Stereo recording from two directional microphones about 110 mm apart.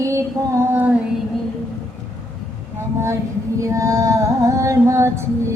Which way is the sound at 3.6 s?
30° right (ahead or behind).